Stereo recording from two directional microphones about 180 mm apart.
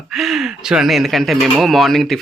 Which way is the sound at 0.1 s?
Centre (ahead or behind).